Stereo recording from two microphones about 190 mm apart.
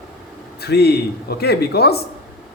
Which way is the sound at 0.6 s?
60° left (ahead or behind).